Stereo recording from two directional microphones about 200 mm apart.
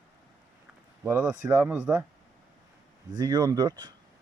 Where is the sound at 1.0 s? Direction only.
10° right (ahead or behind).